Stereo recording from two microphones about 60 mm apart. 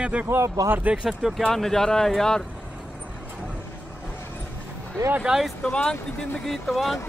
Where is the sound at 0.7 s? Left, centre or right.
Right.